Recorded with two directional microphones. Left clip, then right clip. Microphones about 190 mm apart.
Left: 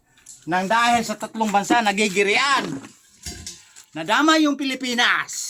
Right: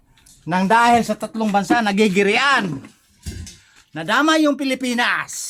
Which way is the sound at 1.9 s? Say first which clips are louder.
Right 3 dB; 30° right (ahead or behind).